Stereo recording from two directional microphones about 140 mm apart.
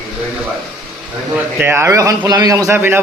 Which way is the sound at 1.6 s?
15° right (ahead or behind).